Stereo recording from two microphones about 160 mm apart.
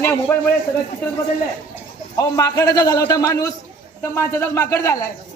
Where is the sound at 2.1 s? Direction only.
20° left (ahead or behind).